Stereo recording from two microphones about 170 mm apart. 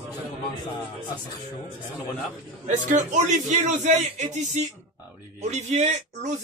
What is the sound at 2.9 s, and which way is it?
Speech, 45° right (ahead or behind).